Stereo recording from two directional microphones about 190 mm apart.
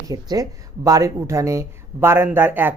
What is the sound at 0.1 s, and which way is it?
Speech, 20° right (ahead or behind).